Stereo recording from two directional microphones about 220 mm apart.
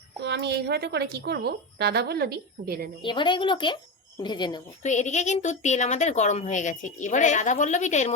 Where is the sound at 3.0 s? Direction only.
20° left (ahead or behind).